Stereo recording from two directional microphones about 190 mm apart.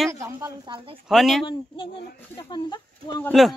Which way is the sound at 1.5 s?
25° left (ahead or behind).